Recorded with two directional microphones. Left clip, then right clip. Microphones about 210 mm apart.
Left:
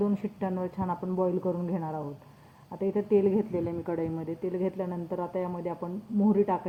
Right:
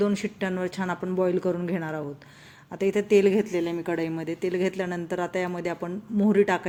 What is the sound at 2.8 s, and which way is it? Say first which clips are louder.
A woman's voice: right 5 dB; 25° right (ahead or behind).